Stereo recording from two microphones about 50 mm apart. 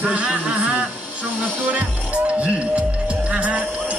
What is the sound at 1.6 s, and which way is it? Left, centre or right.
Music, right.